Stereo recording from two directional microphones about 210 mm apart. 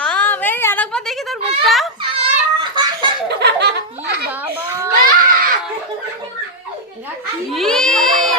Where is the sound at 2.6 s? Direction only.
20° right (ahead or behind).